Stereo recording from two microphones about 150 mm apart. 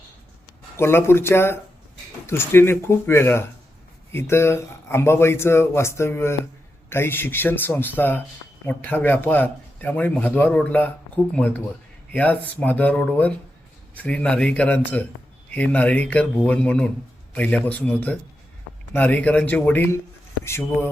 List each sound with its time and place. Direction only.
0.8 s speech: 15° left (ahead or behind)